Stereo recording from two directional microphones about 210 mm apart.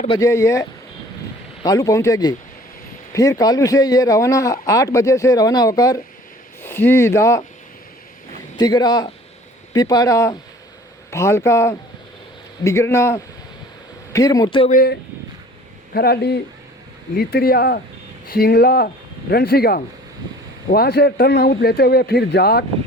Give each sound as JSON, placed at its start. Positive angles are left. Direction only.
{"t": 0.2, "sound": "speech", "side_deg": 15}
{"t": 8.5, "sound": "a man's voice", "side_deg": 20}
{"t": 14.7, "sound": "a man's voice", "side_deg": 45}